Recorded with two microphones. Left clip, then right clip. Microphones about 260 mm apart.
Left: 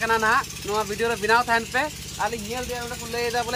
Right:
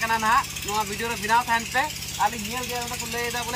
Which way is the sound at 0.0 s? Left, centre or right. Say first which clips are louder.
Left 1 dB; centre.